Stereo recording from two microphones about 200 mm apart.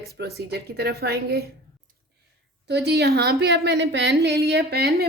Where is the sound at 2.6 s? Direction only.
55° right (ahead or behind).